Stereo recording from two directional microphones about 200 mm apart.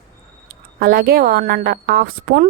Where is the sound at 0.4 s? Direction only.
45° right (ahead or behind).